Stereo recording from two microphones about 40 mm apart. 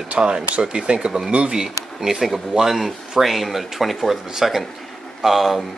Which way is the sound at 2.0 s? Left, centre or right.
Centre.